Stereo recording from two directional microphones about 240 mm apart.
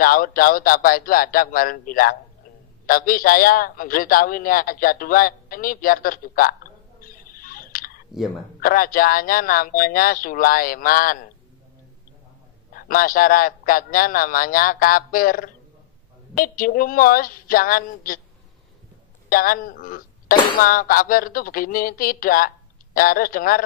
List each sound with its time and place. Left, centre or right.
0.0 s a man's voice: left
12.7 s a man's voice: left
19.2 s a man's voice: left